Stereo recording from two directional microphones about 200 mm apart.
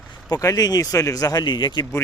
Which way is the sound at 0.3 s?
15° left (ahead or behind).